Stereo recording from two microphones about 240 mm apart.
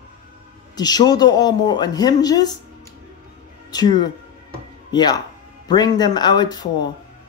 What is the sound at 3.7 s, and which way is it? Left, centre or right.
Speech, centre.